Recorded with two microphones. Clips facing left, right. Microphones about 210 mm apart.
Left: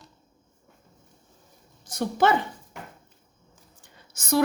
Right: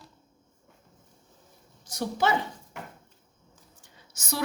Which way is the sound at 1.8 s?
55° left (ahead or behind).